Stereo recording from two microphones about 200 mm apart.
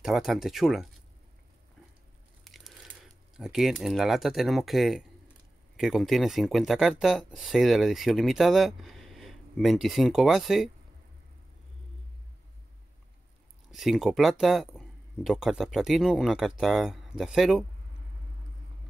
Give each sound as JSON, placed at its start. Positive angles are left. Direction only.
{"t": 0.0, "sound": "speech", "side_deg": 0}
{"t": 2.4, "sound": "speech", "side_deg": 0}
{"t": 13.7, "sound": "speech", "side_deg": 0}